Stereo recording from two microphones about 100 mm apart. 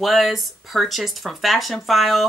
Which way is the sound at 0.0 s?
Centre (ahead or behind).